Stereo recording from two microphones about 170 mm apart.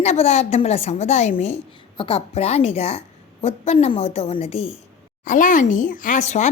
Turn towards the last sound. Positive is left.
turn(degrees=45)  # may be behind; listen again after turning